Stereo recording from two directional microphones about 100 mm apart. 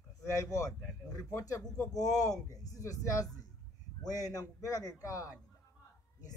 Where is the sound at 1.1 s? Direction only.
35° left (ahead or behind).